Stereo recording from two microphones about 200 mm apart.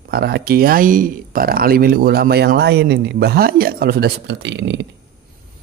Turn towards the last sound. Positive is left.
turn(degrees=-60)  # may be behind; listen again after turning